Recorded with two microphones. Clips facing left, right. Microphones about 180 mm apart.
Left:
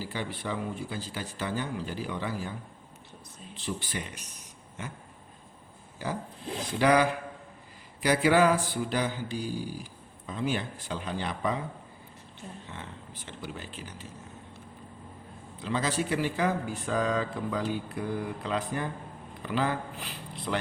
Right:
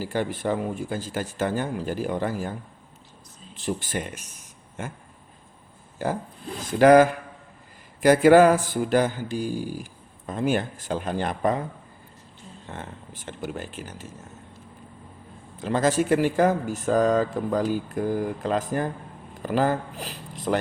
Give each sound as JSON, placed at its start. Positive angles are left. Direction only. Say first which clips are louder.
{"t": 0.0, "sound": "speech", "louder": "right 8 dB", "side_deg": -45}
{"t": 6.0, "sound": "speech", "louder": "right 6 dB", "side_deg": -50}
{"t": 12.6, "sound": "speech", "louder": "right 5 dB", "side_deg": -50}
{"t": 15.5, "sound": "speech", "louder": "right 8 dB", "side_deg": -45}